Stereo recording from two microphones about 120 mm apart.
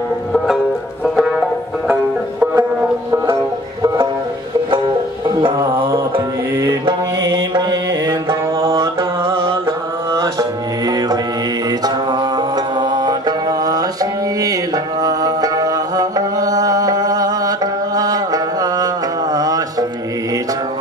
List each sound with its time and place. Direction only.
1.0 s music: centre (ahead or behind)
2.4 s banjo: 10° right (ahead or behind)
3.8 s music: 30° right (ahead or behind)
6.6 s music: 25° right (ahead or behind)
7.5 s music: 35° right (ahead or behind)
9.5 s mantra: 25° right (ahead or behind)
10.9 s music: 35° right (ahead or behind)
19.3 s mantra: 30° right (ahead or behind)